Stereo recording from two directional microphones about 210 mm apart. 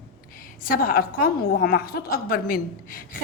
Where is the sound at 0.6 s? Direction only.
45° left (ahead or behind).